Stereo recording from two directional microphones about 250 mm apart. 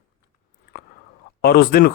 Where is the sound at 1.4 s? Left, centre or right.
Left.